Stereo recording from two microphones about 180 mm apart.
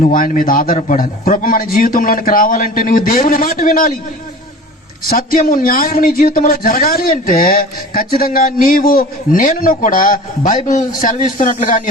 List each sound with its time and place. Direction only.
0.0 s a man's voice: 50° left (ahead or behind)
5.0 s a man's voice: 50° left (ahead or behind)